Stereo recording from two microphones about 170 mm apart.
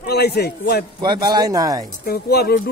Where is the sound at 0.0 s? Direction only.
70° left (ahead or behind).